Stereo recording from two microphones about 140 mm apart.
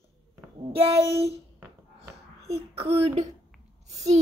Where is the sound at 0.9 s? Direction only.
20° right (ahead or behind).